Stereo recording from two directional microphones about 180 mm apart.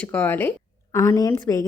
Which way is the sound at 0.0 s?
10° left (ahead or behind).